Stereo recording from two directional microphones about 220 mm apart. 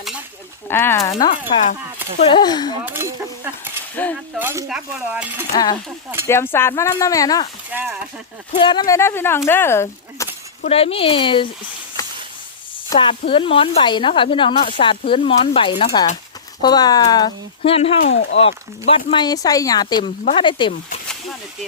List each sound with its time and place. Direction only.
0.7 s speech: 10° left (ahead or behind)
2.1 s speech: 25° left (ahead or behind)
2.8 s speech: 10° right (ahead or behind)
4.0 s speech: 10° left (ahead or behind)
4.4 s speech: 10° right (ahead or behind)
6.2 s speech: 10° left (ahead or behind)
7.7 s speech: 10° right (ahead or behind)
8.5 s speech: 20° left (ahead or behind)
10.7 s speech: 25° left (ahead or behind)
12.0 s a sound: 15° left (ahead or behind)
12.9 s speech: 25° left (ahead or behind)
18.1 s speech: 55° left (ahead or behind)
18.3 s speech: 25° left (ahead or behind)